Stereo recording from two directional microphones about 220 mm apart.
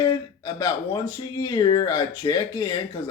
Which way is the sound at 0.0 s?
15° left (ahead or behind).